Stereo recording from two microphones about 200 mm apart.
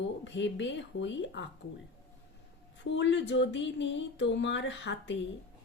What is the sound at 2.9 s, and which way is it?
Speech, 65° left (ahead or behind).